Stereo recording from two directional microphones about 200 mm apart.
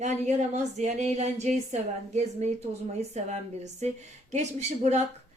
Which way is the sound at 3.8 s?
35° right (ahead or behind).